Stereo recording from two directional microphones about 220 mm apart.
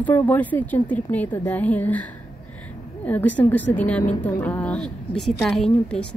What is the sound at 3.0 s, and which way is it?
A woman's voice, 5° left (ahead or behind).